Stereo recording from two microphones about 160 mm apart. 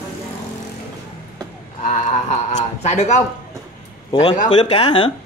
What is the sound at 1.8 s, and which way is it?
Speech, 50° left (ahead or behind).